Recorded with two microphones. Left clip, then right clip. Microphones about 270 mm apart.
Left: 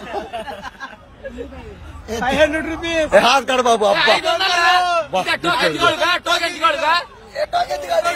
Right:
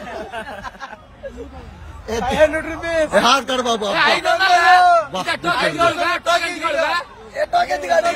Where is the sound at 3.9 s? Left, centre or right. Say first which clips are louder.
Even; centre.